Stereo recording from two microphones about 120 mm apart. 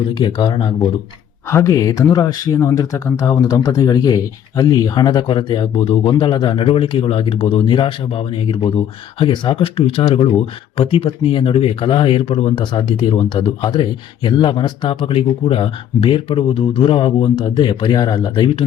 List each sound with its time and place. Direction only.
0.1 s speech: 40° left (ahead or behind)
1.5 s speech: 25° left (ahead or behind); by 18.5 s 40° left (ahead or behind)